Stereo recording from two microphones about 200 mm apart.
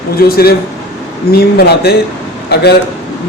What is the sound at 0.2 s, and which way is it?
A man's voice, 50° left (ahead or behind).